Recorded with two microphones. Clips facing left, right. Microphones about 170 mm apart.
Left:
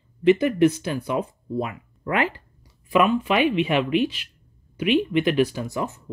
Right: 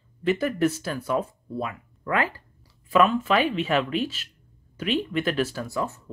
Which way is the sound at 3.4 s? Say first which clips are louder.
Left 4 dB; 40° right (ahead or behind).